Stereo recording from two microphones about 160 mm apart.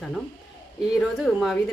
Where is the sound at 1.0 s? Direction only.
Centre (ahead or behind).